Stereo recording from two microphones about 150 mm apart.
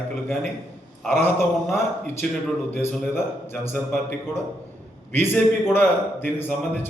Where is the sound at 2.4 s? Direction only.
10° left (ahead or behind).